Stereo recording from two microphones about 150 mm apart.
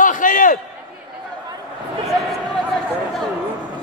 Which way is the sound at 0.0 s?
60° left (ahead or behind).